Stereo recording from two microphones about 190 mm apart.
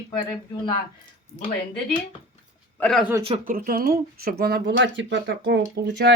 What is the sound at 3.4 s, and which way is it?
Speech, 50° right (ahead or behind).